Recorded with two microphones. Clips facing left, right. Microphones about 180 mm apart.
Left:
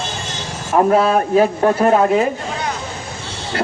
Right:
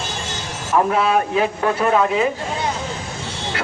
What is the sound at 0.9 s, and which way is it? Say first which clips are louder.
Speech: left 4 dB; 40° left (ahead or behind).